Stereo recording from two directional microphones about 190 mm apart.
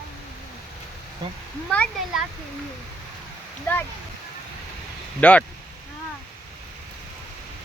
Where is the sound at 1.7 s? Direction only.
5° left (ahead or behind).